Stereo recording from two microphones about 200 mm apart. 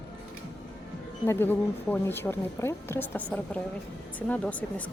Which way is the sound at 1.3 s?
10° left (ahead or behind).